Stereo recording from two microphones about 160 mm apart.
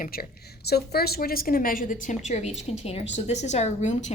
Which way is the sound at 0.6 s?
85° left.